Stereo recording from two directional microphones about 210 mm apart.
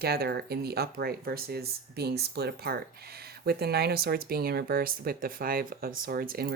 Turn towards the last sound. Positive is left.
turn(degrees=-45)  # may be behind; listen again after turning